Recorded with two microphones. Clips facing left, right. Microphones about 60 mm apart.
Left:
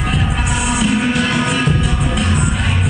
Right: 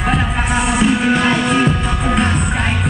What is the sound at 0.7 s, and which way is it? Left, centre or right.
Music, right.